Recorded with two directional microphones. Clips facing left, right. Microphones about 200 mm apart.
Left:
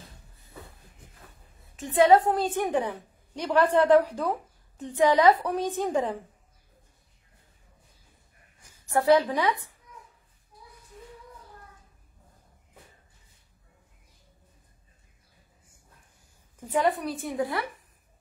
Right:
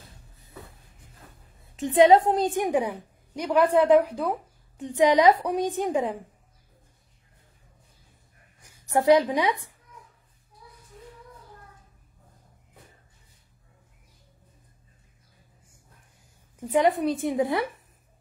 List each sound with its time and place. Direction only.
1.8 s a woman's voice: 20° right (ahead or behind)
8.7 s a woman's voice: 15° right (ahead or behind)
16.5 s a woman's voice: 20° right (ahead or behind)